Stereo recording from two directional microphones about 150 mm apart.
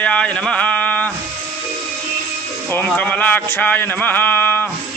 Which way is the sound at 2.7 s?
10° left (ahead or behind).